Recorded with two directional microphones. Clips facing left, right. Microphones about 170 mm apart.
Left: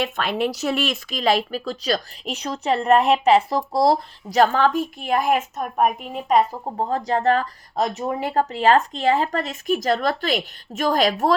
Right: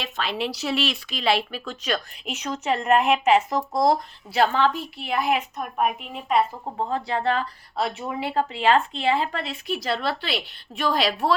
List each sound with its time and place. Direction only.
0.0 s speech: 50° left (ahead or behind)